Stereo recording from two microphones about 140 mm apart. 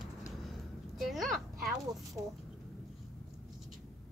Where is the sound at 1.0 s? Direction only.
Centre (ahead or behind).